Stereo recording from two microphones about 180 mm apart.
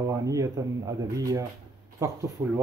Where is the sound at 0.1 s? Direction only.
20° right (ahead or behind).